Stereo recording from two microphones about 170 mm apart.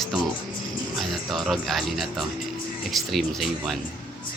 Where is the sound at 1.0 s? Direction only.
Centre (ahead or behind).